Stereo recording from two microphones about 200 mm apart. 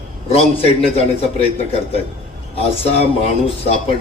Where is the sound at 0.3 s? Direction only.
30° left (ahead or behind).